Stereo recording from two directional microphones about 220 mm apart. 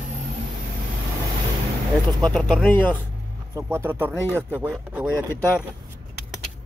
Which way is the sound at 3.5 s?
10° right (ahead or behind).